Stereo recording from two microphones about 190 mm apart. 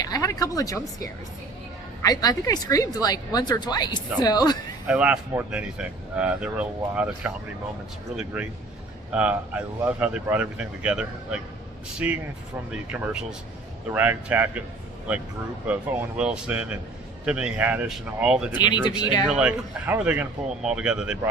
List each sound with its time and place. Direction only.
0.0 s a woman's voice: 20° left (ahead or behind)
4.9 s speech: 5° right (ahead or behind)
18.5 s a woman's voice: 20° left (ahead or behind)
19.3 s speech: 5° right (ahead or behind)